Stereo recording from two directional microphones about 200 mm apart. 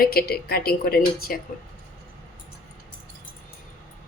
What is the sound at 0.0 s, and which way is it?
Speech, 50° left (ahead or behind).